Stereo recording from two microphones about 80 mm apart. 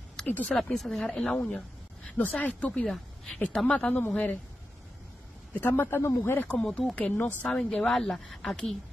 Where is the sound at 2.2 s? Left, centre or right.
Centre.